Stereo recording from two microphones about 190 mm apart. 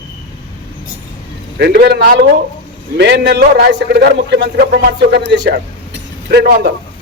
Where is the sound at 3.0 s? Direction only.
65° right (ahead or behind).